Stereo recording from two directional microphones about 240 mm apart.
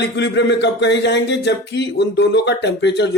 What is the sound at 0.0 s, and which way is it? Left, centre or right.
Speech, left.